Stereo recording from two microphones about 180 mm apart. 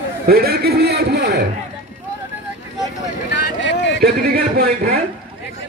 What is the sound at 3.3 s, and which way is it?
Boat, 75° left (ahead or behind).